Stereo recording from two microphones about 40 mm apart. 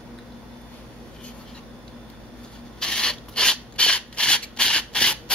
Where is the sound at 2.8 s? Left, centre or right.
Centre.